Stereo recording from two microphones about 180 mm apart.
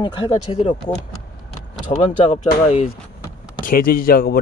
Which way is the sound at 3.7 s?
50° left (ahead or behind).